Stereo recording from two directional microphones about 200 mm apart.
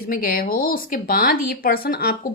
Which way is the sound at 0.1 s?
45° left (ahead or behind).